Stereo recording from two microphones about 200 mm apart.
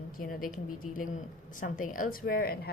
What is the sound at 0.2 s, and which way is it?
Speech, 45° left (ahead or behind).